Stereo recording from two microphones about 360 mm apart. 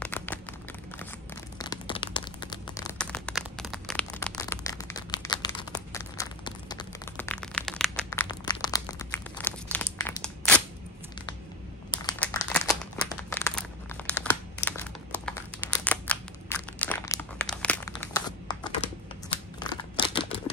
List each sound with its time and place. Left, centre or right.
0.0 s a sound: centre
1.6 s crumpling: centre
11.9 s crumpling: centre
15.1 s crumpling: centre
19.6 s camera: centre